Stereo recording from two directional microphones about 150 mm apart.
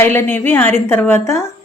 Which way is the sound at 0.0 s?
15° left (ahead or behind).